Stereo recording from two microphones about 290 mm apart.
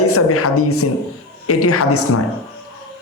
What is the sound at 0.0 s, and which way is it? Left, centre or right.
A man's voice, left.